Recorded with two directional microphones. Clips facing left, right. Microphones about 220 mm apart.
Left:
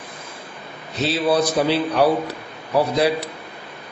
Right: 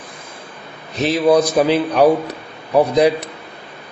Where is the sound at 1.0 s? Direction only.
15° right (ahead or behind).